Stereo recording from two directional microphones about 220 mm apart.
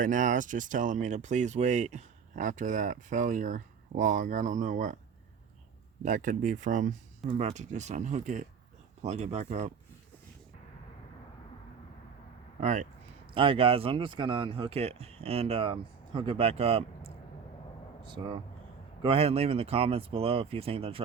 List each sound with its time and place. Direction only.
0.0 s speech: 35° right (ahead or behind)
6.0 s speech: 35° right (ahead or behind)
12.5 s speech: 35° right (ahead or behind)